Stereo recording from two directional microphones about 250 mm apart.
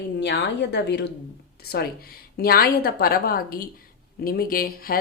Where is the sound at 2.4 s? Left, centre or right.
Left.